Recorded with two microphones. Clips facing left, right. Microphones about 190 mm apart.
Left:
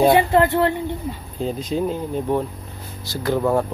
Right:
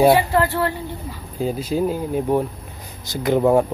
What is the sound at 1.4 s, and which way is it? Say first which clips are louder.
Speech: right 2 dB; 5° right (ahead or behind).